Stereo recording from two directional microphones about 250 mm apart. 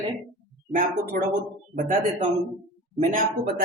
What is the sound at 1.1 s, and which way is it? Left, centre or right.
Speech, right.